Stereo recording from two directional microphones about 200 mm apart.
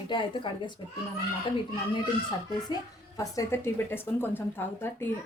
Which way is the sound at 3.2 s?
15° left (ahead or behind).